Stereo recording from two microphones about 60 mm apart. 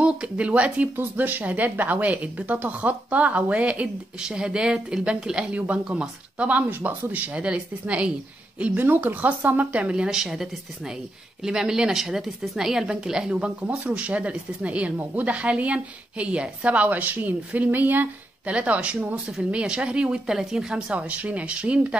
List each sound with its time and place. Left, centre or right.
0.0 s speech: right
8.7 s a woman's voice: right; by 13.5 s centre
13.6 s speech: right
18.5 s a woman's voice: right
20.9 s speech: right